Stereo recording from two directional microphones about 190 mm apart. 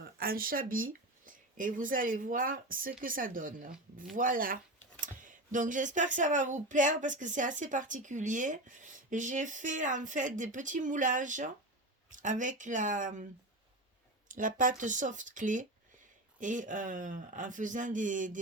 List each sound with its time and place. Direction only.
0.2 s speech: 50° right (ahead or behind)
14.3 s speech: 45° right (ahead or behind)